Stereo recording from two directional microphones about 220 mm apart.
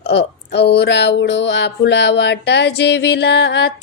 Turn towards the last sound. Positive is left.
turn(degrees=50)  # may be behind; listen again after turning